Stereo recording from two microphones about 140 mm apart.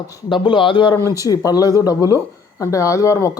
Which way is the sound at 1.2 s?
25° left (ahead or behind).